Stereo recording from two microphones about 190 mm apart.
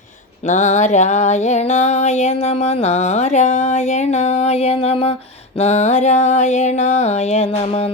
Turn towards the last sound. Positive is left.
turn(degrees=35)  # may be behind; listen again after turning